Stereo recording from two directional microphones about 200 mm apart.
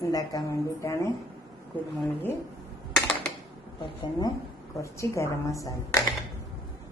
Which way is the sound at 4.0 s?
20° left (ahead or behind).